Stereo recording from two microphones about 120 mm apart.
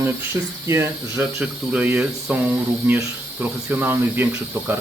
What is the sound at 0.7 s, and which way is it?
Speech, 20° right (ahead or behind).